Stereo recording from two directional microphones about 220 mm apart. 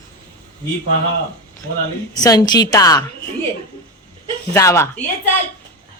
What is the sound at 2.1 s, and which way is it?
Speech, 15° left (ahead or behind).